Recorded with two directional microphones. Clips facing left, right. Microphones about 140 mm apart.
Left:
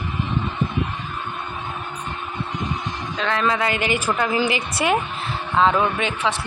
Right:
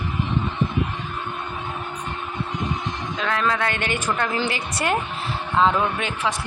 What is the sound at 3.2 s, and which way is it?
A woman's voice, centre (ahead or behind).